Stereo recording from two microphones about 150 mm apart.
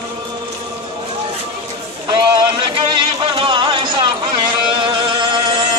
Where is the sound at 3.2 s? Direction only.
35° right (ahead or behind).